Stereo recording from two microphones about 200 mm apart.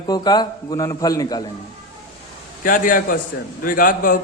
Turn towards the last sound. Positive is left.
turn(degrees=45)  # may be behind; listen again after turning